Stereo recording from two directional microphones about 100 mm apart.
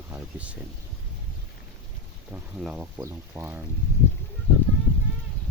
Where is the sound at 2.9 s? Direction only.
25° right (ahead or behind).